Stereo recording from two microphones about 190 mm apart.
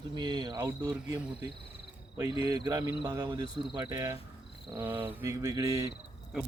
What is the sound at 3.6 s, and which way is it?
Insect, 15° right (ahead or behind).